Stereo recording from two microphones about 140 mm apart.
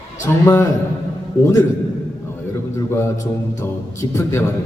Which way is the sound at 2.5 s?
20° left (ahead or behind).